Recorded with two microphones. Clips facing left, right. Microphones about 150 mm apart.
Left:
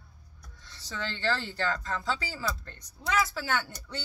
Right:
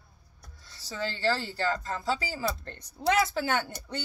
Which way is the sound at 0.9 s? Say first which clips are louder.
Right 2 dB; 40° right (ahead or behind).